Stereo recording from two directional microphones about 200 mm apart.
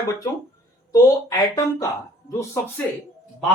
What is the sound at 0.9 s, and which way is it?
Speech, 15° left (ahead or behind).